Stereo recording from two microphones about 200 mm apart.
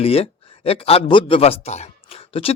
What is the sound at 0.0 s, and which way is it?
A man's voice, 30° left (ahead or behind).